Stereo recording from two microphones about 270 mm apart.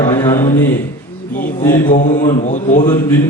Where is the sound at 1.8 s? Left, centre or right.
Left.